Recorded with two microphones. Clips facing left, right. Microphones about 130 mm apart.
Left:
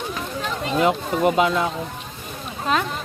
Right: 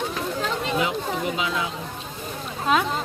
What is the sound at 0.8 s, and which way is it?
Speech, 50° left (ahead or behind).